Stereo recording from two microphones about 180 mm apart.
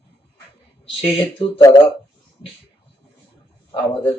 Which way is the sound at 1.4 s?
30° left (ahead or behind).